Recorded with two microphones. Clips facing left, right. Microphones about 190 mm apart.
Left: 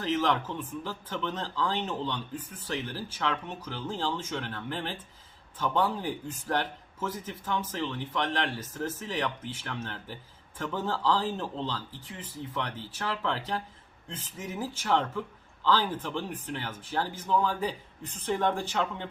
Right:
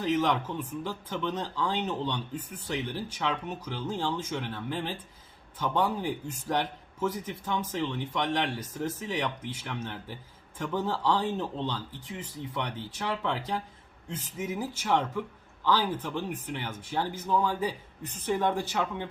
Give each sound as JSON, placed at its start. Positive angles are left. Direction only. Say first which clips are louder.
{"t": 0.0, "sound": "a man's voice", "louder": "right 1 dB", "side_deg": -15}